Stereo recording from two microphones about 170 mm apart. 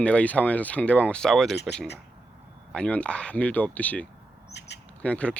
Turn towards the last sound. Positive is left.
turn(degrees=5)  # may be behind; listen again after turning